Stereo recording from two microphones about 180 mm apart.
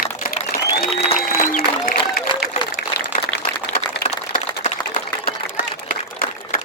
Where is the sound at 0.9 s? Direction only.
35° left (ahead or behind).